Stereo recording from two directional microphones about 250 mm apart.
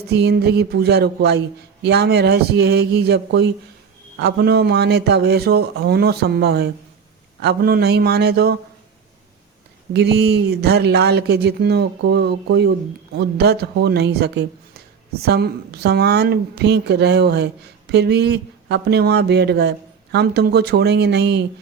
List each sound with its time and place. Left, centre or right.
0.1 s speech: right
9.9 s speech: right